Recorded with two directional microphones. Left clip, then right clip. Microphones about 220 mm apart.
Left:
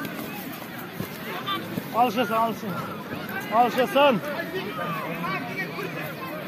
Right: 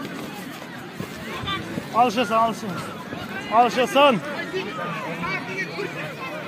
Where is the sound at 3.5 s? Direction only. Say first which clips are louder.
Right 3 dB; 40° right (ahead or behind).